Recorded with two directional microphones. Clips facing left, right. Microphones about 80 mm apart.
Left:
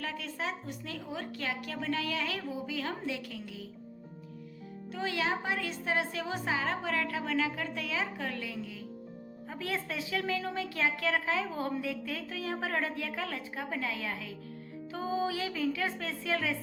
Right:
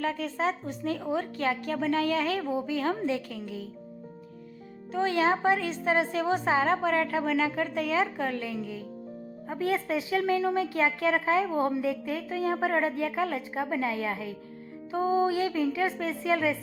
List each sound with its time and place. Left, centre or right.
0.0 s a woman's voice: right
4.9 s a woman's voice: right